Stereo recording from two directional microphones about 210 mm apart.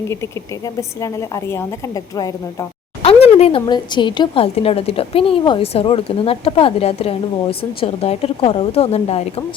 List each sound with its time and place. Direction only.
0.1 s a woman's voice: 15° left (ahead or behind)
3.0 s speech: 30° left (ahead or behind)